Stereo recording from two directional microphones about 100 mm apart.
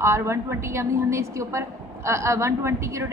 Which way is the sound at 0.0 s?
30° right (ahead or behind).